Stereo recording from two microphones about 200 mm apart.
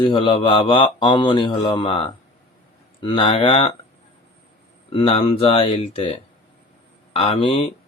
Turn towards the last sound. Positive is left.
turn(degrees=25)  # may be behind; listen again after turning